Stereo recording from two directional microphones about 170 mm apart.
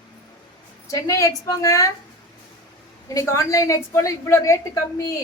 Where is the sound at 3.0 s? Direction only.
20° left (ahead or behind).